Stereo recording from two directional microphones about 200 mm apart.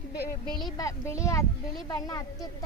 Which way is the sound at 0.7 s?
15° left (ahead or behind).